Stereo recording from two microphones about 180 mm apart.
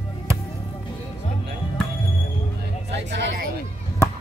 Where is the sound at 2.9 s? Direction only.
70° right (ahead or behind).